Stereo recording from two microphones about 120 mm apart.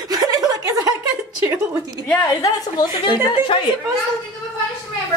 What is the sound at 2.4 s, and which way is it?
A woman's voice, 40° left (ahead or behind).